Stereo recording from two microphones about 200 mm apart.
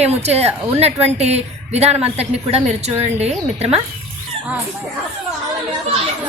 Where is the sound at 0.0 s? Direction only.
30° right (ahead or behind).